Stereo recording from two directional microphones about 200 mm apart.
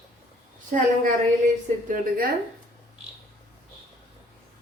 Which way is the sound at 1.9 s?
45° right (ahead or behind).